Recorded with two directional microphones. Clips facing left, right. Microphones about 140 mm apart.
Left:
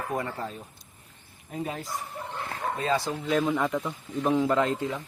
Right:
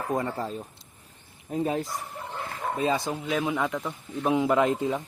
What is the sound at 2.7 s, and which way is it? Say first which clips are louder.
Speech: right 2 dB; 20° right (ahead or behind).